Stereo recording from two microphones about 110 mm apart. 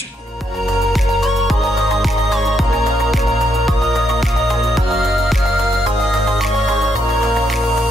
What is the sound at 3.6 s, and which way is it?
Music, centre (ahead or behind).